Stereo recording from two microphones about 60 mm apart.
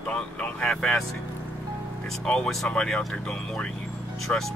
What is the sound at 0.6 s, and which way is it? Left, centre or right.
Speech, centre.